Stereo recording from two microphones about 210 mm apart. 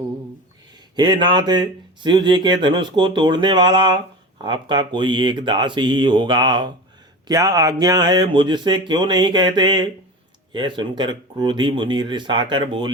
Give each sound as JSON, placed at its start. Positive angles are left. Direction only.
{"t": 0.9, "sound": "speech", "side_deg": -20}